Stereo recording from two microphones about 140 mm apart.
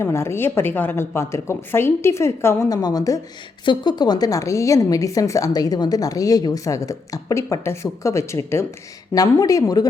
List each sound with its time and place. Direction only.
0.0 s a woman's voice: 20° left (ahead or behind)